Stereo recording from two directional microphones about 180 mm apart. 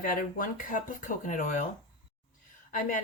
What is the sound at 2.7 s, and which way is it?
Speech, 45° left (ahead or behind).